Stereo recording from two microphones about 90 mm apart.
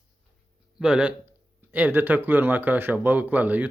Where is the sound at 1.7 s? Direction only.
20° right (ahead or behind).